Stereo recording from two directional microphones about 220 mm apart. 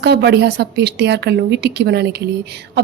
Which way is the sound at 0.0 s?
50° right (ahead or behind).